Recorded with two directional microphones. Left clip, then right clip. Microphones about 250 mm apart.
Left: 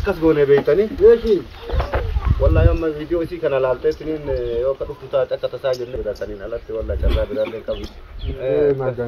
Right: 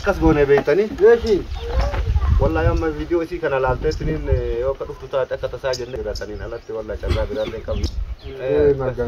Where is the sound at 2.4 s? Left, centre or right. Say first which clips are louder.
Left 1 dB; right.